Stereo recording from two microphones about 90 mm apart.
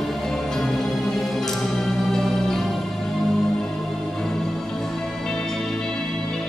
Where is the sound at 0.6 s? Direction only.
5° left (ahead or behind).